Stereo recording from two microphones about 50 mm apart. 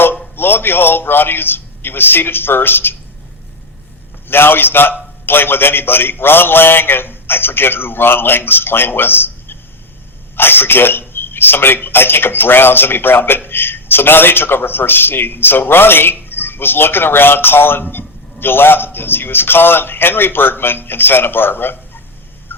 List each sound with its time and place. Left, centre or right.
0.3 s a man's voice: left
4.3 s a man's voice: left